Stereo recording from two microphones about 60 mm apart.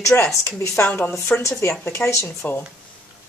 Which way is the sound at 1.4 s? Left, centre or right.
Left.